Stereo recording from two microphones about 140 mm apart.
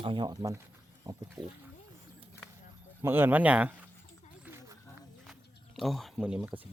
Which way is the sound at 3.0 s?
15° right (ahead or behind).